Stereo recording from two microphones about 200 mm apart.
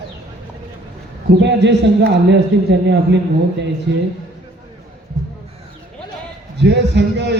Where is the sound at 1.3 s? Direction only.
60° right (ahead or behind).